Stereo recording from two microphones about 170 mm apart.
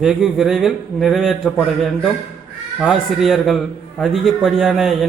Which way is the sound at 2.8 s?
Centre (ahead or behind).